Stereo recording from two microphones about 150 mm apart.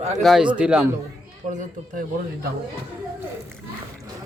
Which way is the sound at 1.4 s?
55° right (ahead or behind).